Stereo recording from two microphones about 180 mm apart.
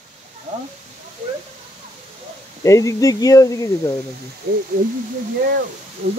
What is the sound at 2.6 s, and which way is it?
Speech, 15° left (ahead or behind).